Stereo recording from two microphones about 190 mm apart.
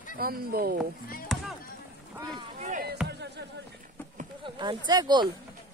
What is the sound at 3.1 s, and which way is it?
Music, 60° right (ahead or behind).